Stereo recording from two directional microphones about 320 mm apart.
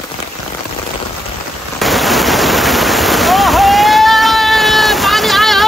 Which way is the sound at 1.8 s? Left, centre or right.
Centre.